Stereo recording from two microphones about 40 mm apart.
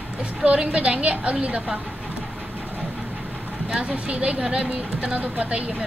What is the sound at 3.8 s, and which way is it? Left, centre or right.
Speech, right.